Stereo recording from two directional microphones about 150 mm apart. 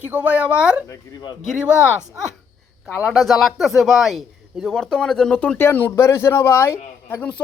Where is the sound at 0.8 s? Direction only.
30° left (ahead or behind).